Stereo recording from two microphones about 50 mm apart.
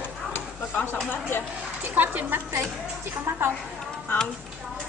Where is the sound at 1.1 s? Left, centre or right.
Left.